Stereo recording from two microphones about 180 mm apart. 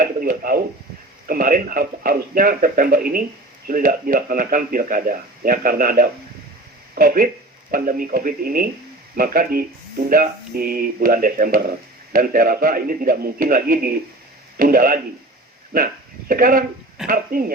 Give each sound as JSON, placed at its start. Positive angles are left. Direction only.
{"t": 0.0, "sound": "a man's voice", "side_deg": -50}
{"t": 16.3, "sound": "a man's voice", "side_deg": -50}
{"t": 17.0, "sound": "speech", "side_deg": -5}